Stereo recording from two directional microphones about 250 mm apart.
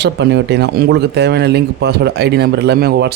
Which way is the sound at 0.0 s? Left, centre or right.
Right.